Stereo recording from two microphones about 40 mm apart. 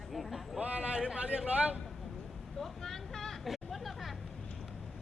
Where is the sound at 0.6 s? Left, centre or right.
Right.